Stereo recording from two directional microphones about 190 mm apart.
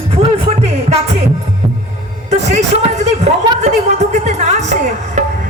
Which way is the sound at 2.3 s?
35° right (ahead or behind).